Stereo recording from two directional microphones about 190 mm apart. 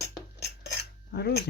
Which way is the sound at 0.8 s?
55° left (ahead or behind).